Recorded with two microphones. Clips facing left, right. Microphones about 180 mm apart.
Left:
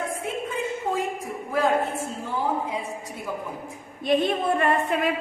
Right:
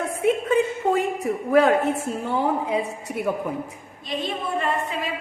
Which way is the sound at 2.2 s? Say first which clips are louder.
Right 4 dB; 70° right (ahead or behind).